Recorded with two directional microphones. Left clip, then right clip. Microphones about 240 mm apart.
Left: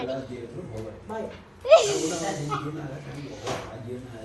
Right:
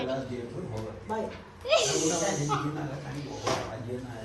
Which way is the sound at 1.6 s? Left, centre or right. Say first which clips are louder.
Left 7 dB; centre.